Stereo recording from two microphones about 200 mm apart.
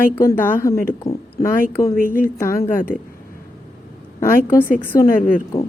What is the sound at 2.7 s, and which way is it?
Speech, 45° left (ahead or behind).